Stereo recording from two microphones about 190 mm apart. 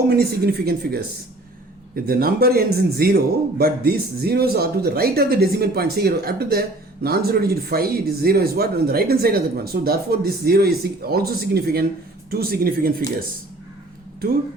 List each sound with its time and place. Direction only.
0.2 s speech: 55° right (ahead or behind)
2.0 s speech: 50° right (ahead or behind)